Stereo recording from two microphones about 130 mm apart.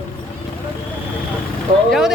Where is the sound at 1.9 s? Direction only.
5° right (ahead or behind).